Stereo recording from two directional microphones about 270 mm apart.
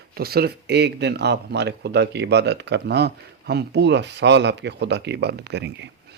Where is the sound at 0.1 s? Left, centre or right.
Right.